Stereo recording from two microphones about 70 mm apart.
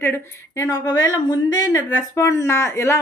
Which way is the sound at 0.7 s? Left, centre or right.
Left.